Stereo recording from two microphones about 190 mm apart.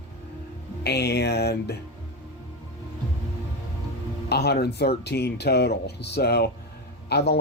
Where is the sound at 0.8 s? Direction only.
60° left (ahead or behind).